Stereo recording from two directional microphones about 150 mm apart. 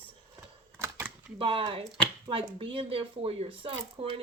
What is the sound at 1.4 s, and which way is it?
Speech, 35° right (ahead or behind).